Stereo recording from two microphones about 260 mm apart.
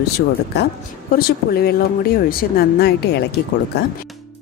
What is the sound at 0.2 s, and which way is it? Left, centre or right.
A woman's voice, left.